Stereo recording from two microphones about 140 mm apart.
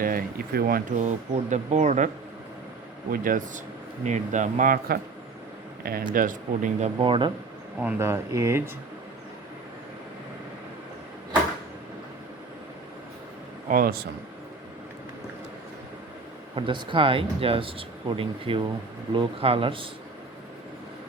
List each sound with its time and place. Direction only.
0.0 s speech: 90° right; by 2.0 s 55° right (ahead or behind)
3.1 s speech: 75° right (ahead or behind)
4.0 s speech: 60° right (ahead or behind)
5.8 s speech: 85° right; by 6.9 s 60° right (ahead or behind)
7.0 s speech: 35° right (ahead or behind)
7.8 s speech: 15° right (ahead or behind)
13.7 s speech: 85° right
16.6 s speech: 35° right (ahead or behind)